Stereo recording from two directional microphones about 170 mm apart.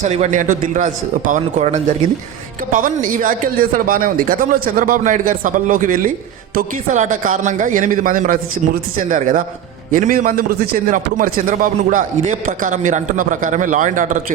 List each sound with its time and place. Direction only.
0.0 s a man's voice: 40° right (ahead or behind)